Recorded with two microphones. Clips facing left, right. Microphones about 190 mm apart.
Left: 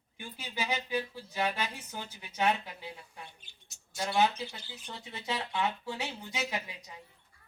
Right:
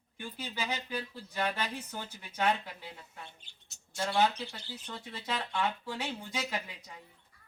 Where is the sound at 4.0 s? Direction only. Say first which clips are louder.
Left 1 dB; 15° left (ahead or behind).